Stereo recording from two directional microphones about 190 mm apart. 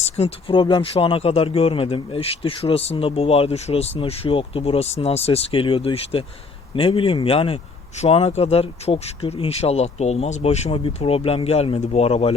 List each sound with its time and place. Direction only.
0.0 s speech: 35° left (ahead or behind)